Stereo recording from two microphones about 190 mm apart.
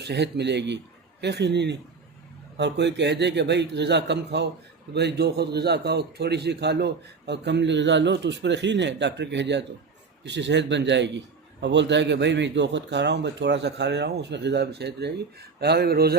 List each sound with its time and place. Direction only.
0.0 s a man's voice: 60° right (ahead or behind)